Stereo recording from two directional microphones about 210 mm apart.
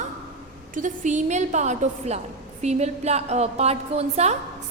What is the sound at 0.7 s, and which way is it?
A woman's voice, 35° right (ahead or behind).